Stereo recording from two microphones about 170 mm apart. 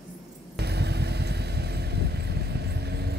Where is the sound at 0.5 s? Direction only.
75° right (ahead or behind).